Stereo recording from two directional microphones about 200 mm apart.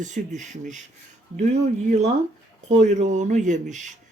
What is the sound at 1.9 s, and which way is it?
Speech, 35° right (ahead or behind).